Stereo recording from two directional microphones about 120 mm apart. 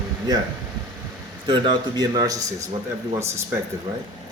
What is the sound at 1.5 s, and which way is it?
Speech, 40° right (ahead or behind).